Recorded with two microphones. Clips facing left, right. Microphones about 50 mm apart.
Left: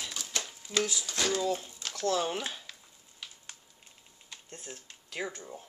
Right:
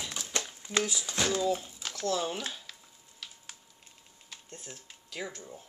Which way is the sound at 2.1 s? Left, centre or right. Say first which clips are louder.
Left 2 dB; centre.